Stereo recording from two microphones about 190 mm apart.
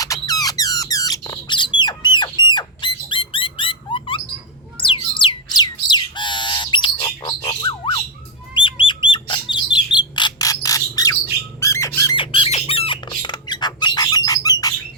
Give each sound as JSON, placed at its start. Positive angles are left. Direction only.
{"t": 0.0, "sound": "a sound", "side_deg": 20}
{"t": 4.8, "sound": "squawk", "side_deg": 25}
{"t": 8.5, "sound": "bird", "side_deg": 25}
{"t": 11.6, "sound": "squawk", "side_deg": 15}
{"t": 12.1, "sound": "squawk", "side_deg": 25}